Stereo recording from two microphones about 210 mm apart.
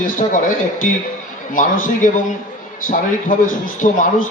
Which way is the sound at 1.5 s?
40° left (ahead or behind).